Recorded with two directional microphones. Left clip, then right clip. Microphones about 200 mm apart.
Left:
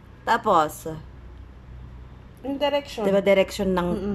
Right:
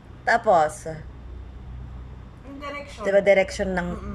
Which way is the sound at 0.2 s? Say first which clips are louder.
Right 1 dB; 15° left (ahead or behind).